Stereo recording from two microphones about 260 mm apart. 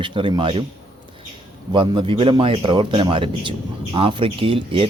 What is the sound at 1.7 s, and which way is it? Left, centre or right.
Speech, centre.